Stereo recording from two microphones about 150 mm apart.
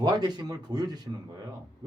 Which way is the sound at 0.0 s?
30° right (ahead or behind).